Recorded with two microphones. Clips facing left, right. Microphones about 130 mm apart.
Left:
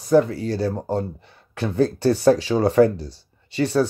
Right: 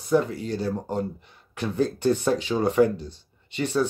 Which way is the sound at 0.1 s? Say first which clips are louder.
Left 5 dB; 35° left (ahead or behind).